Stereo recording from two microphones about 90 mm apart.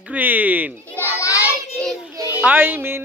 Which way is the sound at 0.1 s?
20° right (ahead or behind).